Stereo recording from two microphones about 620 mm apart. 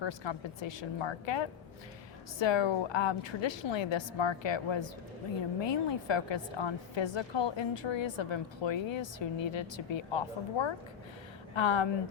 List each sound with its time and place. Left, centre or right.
0.0 s a woman's voice: left